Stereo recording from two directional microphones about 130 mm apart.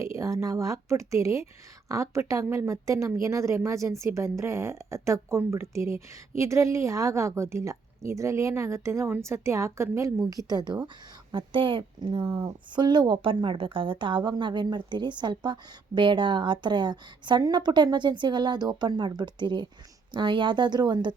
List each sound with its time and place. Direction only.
0.4 s a woman's voice: 25° right (ahead or behind)